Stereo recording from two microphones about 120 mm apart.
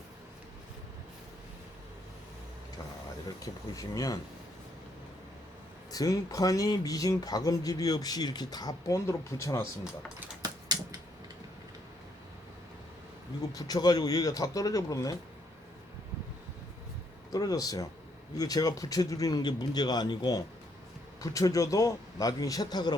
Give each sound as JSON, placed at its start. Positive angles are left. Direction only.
{"t": 3.2, "sound": "speech", "side_deg": 30}
{"t": 5.9, "sound": "speech", "side_deg": 30}
{"t": 13.5, "sound": "speech", "side_deg": 30}
{"t": 17.3, "sound": "speech", "side_deg": 30}